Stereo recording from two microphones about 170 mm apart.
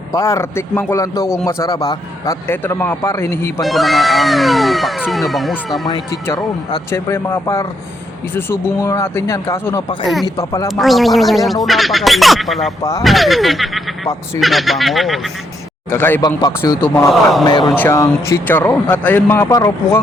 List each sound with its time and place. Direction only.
0.1 s speech: 20° left (ahead or behind)
3.6 s speech: centre (ahead or behind)
6.2 s speech: 20° left (ahead or behind)
10.7 s speech: centre (ahead or behind)
15.9 s speech: 10° left (ahead or behind)
16.2 s speech: 25° left (ahead or behind)
16.8 s speech: 10° left (ahead or behind)
17.4 s speech: 25° left (ahead or behind)
17.7 s speech: 10° left (ahead or behind)